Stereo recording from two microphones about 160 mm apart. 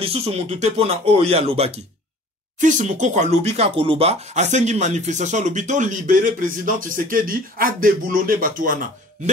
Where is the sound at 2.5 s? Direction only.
50° right (ahead or behind).